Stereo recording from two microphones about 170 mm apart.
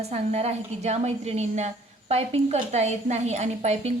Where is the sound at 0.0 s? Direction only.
40° right (ahead or behind).